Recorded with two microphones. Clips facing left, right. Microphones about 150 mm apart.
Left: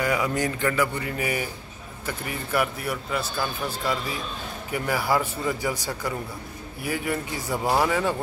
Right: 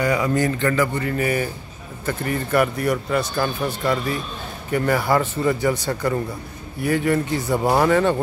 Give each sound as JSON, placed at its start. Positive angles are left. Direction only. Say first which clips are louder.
{"t": 0.0, "sound": "a man's voice", "louder": "right 5 dB", "side_deg": 5}
{"t": 7.5, "sound": "speech", "louder": "right 4 dB", "side_deg": -20}
{"t": 7.8, "sound": "a man's voice", "louder": "right 6 dB", "side_deg": 5}